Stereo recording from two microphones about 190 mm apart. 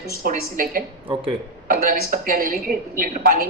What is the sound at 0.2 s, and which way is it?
A woman's voice, 50° right (ahead or behind).